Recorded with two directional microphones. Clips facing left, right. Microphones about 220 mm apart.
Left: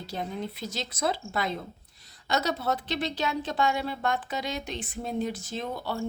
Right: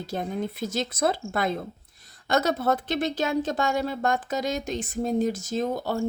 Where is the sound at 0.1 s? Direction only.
50° right (ahead or behind).